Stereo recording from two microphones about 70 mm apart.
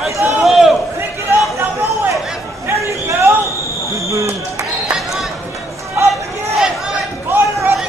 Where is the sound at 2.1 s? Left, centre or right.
Centre.